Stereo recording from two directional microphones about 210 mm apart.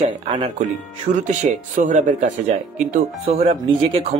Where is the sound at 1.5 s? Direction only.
35° right (ahead or behind).